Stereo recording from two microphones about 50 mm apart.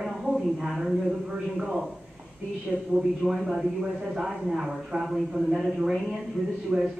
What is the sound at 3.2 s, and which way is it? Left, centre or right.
A man's voice, centre.